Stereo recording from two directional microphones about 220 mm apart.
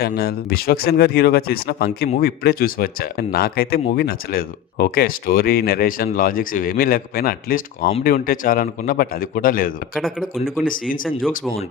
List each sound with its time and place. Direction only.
0.0 s a man's voice: 45° left (ahead or behind)
9.9 s speech: centre (ahead or behind)
10.7 s a man's voice: 40° left (ahead or behind)